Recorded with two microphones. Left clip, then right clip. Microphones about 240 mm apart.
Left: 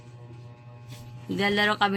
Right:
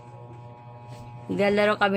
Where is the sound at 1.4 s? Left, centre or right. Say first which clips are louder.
Right 2 dB; left.